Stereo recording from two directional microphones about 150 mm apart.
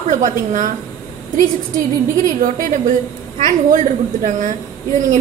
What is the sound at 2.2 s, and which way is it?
A woman's voice, 60° right (ahead or behind).